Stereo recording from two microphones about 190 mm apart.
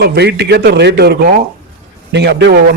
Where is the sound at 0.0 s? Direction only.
60° right (ahead or behind).